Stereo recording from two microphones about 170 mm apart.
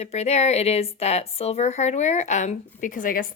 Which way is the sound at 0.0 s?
40° left (ahead or behind).